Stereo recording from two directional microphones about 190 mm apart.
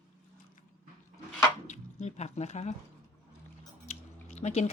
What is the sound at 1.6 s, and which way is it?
Speech, 40° left (ahead or behind).